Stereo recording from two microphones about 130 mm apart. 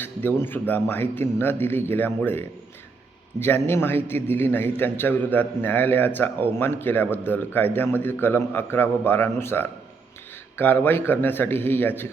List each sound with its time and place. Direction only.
0.0 s a man's voice: 15° left (ahead or behind)
3.4 s a man's voice: 15° left (ahead or behind)